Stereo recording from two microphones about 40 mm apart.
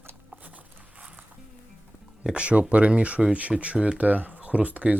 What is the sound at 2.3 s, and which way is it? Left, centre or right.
Speech, right.